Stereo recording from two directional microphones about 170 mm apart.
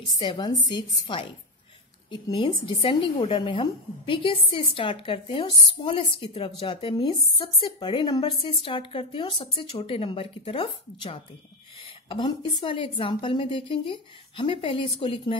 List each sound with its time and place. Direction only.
0.2 s a woman's voice: 30° left (ahead or behind)